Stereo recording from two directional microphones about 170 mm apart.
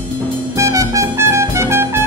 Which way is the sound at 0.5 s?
20° right (ahead or behind).